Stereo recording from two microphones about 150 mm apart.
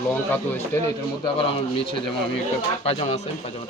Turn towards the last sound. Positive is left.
turn(degrees=40)  # may be behind; listen again after turning